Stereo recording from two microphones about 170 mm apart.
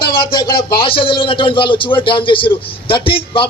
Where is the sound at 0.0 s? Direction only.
60° left (ahead or behind).